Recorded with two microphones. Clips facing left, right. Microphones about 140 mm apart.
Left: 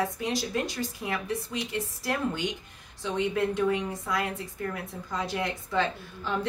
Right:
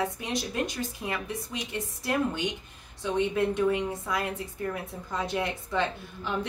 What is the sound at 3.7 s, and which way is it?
A woman's voice, 25° right (ahead or behind).